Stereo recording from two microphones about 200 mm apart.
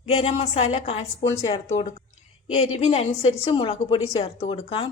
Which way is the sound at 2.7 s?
30° left (ahead or behind).